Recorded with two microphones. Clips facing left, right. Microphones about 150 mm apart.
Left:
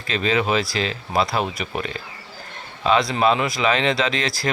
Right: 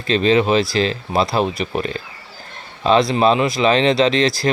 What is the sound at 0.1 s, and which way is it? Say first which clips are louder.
Speech: right 6 dB; 25° right (ahead or behind).